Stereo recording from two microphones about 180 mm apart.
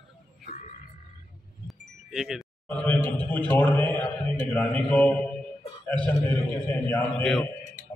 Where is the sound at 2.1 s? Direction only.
Centre (ahead or behind).